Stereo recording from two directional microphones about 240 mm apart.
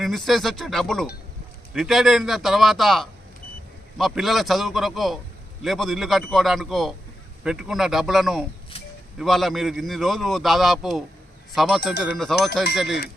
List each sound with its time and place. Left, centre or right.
0.0 s a man's voice: centre
8.7 s a sound: left
9.1 s a man's voice: centre